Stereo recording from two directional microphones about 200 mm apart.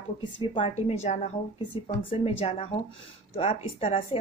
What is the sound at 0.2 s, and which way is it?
A woman's voice, 25° left (ahead or behind).